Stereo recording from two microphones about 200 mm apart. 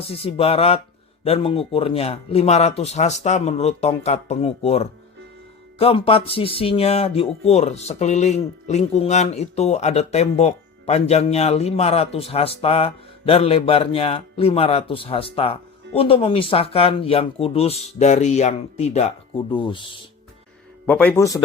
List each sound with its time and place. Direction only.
0.1 s speech: 30° left (ahead or behind)
20.8 s speech: 5° left (ahead or behind)